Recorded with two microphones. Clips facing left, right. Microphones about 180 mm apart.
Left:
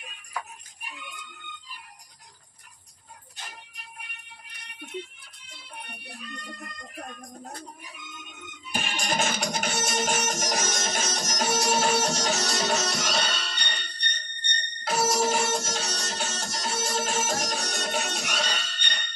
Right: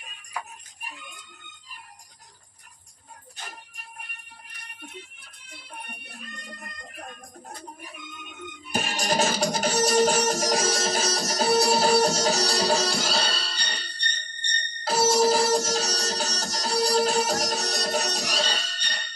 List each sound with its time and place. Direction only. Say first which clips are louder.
6.2 s music: left 2 dB; 50° right (ahead or behind)
8.7 s music: right 4 dB; 40° right (ahead or behind)